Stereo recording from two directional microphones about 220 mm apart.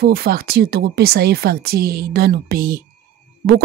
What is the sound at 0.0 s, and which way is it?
Speech, 45° right (ahead or behind).